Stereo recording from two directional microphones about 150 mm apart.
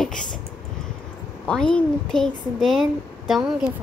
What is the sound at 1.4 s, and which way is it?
Speech, 5° left (ahead or behind).